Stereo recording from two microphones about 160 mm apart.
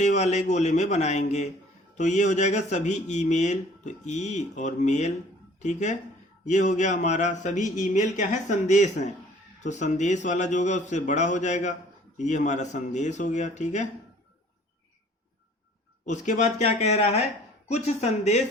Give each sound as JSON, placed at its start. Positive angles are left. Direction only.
{"t": 0.0, "sound": "speech", "side_deg": 45}
{"t": 16.0, "sound": "speech", "side_deg": 50}